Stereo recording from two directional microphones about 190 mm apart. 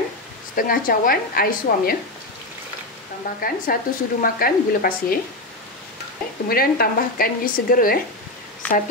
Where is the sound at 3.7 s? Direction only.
50° left (ahead or behind).